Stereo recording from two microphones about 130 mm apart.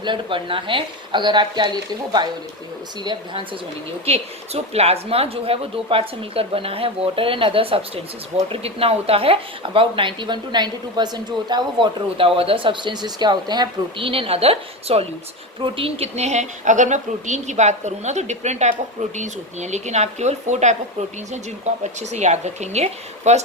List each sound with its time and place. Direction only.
0.0 s speech: 40° right (ahead or behind)
4.0 s a woman's voice: 50° right (ahead or behind); by 14.1 s 35° right (ahead or behind)
14.1 s a woman's voice: 45° right (ahead or behind)